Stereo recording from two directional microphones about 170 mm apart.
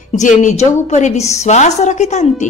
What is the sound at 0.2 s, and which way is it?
A woman's voice, 45° left (ahead or behind).